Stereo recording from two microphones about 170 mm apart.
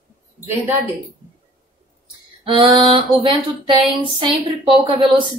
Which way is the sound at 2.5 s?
30° right (ahead or behind).